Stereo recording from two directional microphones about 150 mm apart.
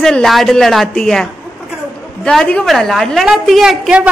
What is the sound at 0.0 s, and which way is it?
A woman's voice, centre (ahead or behind).